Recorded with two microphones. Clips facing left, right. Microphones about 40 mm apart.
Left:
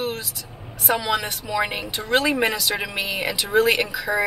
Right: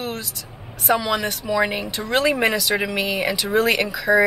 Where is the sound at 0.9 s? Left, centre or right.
Centre.